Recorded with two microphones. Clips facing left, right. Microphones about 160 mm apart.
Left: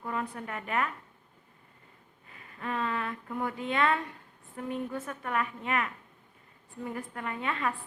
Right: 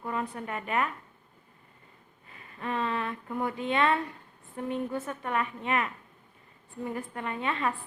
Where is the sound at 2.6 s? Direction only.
25° right (ahead or behind).